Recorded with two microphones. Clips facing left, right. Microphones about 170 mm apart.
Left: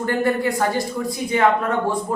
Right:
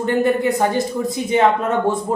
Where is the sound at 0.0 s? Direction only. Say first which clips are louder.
Right 3 dB; 20° right (ahead or behind).